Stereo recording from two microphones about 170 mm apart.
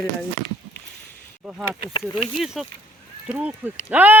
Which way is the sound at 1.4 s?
Centre (ahead or behind).